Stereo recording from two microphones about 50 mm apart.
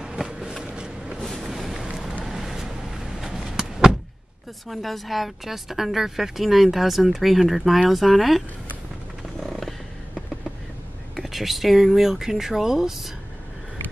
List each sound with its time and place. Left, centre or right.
0.0 s a sound: centre
0.7 s vehicle: centre
1.2 s vehicle: centre
2.2 s a sound: centre
4.6 s a woman's voice: centre
11.1 s a woman's voice: centre